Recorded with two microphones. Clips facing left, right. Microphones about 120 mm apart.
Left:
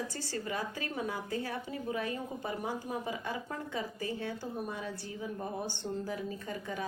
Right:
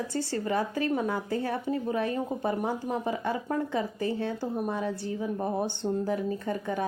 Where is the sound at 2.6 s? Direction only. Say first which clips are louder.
Right 6 dB; 65° right (ahead or behind).